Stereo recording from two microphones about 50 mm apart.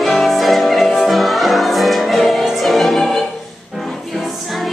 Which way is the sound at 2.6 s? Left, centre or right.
Centre.